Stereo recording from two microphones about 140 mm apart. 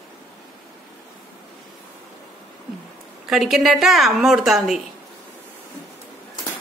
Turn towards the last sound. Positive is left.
turn(degrees=0)  # may be behind; listen again after turning